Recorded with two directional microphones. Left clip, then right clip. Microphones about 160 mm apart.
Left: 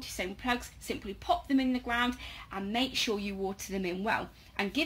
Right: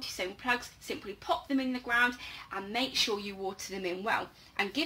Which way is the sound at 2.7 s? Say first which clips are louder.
Even; 55° left (ahead or behind).